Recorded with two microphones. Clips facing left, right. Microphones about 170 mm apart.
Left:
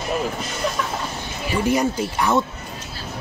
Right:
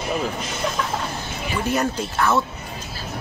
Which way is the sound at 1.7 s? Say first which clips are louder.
Left 2 dB; 10° left (ahead or behind).